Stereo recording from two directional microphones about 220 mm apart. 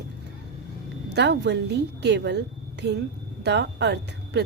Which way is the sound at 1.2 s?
50° right (ahead or behind).